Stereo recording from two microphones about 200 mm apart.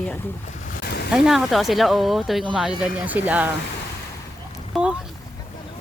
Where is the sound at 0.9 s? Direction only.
50° left (ahead or behind).